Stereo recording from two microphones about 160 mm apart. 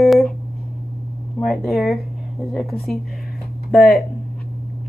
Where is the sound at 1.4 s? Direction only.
Centre (ahead or behind).